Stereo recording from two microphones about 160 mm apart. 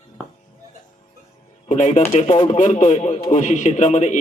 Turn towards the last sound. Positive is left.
turn(degrees=45)  # may be behind; listen again after turning